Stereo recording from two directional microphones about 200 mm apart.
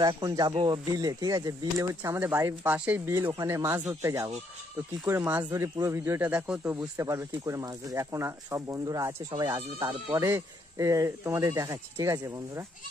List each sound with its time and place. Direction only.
0.0 s speech: 20° right (ahead or behind)